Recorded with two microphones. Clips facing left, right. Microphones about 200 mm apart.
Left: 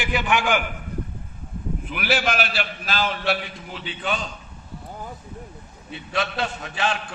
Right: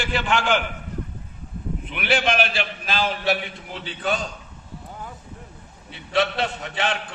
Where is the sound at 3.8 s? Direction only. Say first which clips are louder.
Right 2 dB; 40° right (ahead or behind).